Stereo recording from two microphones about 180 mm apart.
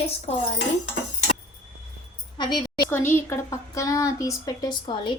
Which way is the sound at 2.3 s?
25° left (ahead or behind).